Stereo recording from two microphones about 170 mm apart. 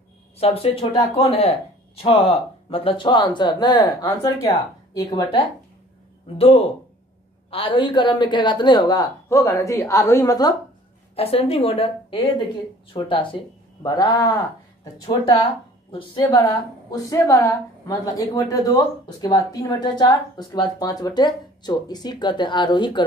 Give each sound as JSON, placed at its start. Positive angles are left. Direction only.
{"t": 0.4, "sound": "a woman's voice", "side_deg": 35}
{"t": 6.3, "sound": "a woman's voice", "side_deg": 35}
{"t": 11.1, "sound": "a woman's voice", "side_deg": 35}
{"t": 15.9, "sound": "a woman's voice", "side_deg": 30}
{"t": 16.9, "sound": "a woman's voice", "side_deg": 20}